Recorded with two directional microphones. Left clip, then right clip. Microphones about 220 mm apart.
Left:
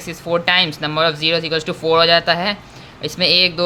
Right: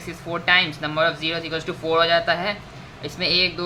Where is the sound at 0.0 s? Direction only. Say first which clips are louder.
Left 7 dB; 45° left (ahead or behind).